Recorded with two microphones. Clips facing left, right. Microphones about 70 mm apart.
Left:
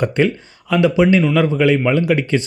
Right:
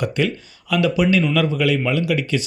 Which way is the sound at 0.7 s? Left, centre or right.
Left.